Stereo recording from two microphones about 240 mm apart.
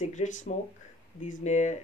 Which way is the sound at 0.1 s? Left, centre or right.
Left.